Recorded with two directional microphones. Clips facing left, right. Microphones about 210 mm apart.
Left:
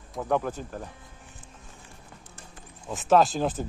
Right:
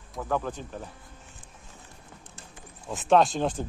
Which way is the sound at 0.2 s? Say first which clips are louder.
Left 3 dB; 15° left (ahead or behind).